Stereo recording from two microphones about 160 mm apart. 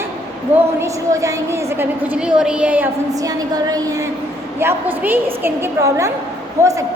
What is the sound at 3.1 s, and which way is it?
A woman's voice, 20° right (ahead or behind).